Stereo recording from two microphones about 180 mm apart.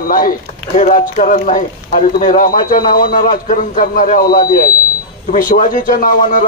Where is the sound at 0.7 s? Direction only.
45° left (ahead or behind).